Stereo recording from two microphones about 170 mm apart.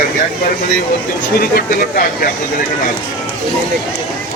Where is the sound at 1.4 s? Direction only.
60° left (ahead or behind).